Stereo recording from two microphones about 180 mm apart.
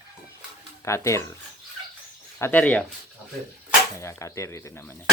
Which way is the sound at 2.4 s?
10° left (ahead or behind).